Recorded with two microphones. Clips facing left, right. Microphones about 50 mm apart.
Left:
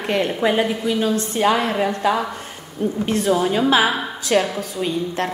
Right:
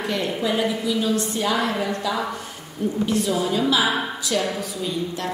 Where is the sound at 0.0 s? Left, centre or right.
Left.